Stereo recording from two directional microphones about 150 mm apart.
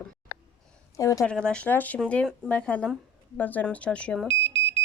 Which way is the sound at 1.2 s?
5° left (ahead or behind).